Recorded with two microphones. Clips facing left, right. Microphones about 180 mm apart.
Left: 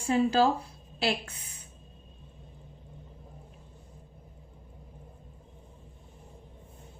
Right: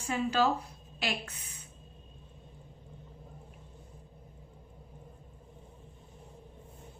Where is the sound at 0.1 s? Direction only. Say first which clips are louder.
Left 5 dB; 35° left (ahead or behind).